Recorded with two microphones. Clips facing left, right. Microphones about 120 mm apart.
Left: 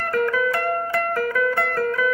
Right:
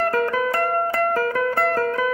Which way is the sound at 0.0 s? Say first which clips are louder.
Right 1 dB; 40° right (ahead or behind).